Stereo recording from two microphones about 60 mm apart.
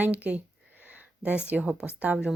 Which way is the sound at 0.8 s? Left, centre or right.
Right.